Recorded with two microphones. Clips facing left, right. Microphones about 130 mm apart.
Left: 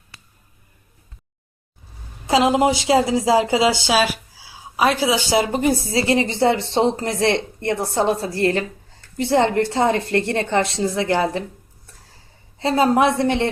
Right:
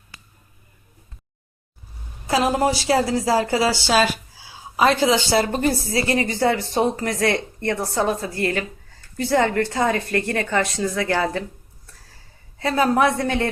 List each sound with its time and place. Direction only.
2.2 s speech: 20° left (ahead or behind)
12.5 s speech: 25° left (ahead or behind)